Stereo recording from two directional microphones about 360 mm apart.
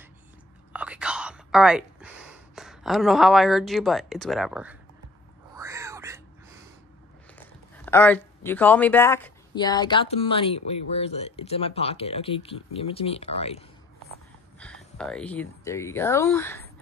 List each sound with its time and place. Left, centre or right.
0.7 s whispering: centre
2.5 s speech: centre
5.6 s a sound: centre
7.3 s speech: centre
14.6 s speech: centre